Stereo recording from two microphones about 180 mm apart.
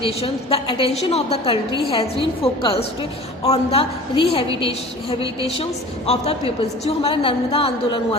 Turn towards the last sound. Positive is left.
turn(degrees=30)  # may be behind; listen again after turning